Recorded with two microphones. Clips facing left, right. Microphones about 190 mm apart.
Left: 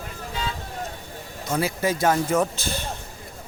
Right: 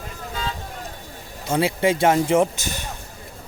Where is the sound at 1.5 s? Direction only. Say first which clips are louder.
Right 4 dB; 25° right (ahead or behind).